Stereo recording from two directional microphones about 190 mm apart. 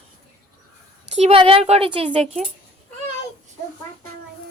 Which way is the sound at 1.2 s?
30° right (ahead or behind).